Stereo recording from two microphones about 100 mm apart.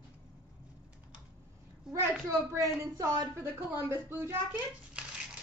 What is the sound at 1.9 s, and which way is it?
A woman's voice, 30° right (ahead or behind).